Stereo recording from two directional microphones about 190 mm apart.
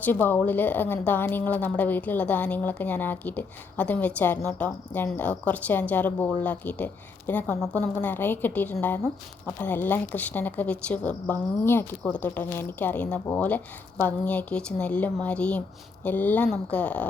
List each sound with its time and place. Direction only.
0.0 s a woman's voice: 10° left (ahead or behind)